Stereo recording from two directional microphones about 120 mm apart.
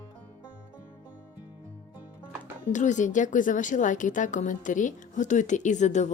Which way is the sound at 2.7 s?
90° left.